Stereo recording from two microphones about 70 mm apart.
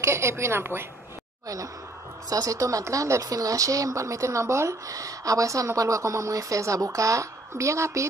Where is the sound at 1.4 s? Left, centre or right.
Right.